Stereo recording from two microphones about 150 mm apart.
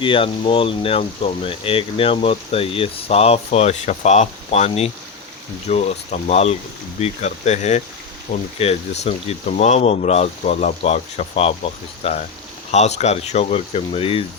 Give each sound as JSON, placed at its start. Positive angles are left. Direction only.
{"t": 0.0, "sound": "speech", "side_deg": 35}